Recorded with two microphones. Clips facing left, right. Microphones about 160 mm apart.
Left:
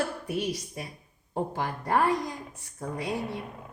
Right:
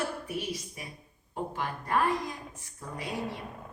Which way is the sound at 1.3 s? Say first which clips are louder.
Left 4 dB; 70° left (ahead or behind).